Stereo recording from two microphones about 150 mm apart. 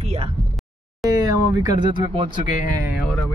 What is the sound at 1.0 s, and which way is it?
Speech, 25° right (ahead or behind).